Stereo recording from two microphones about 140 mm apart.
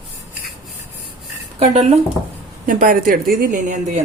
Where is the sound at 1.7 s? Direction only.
50° right (ahead or behind).